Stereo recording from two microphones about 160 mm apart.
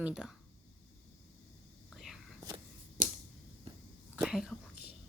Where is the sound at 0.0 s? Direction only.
5° right (ahead or behind).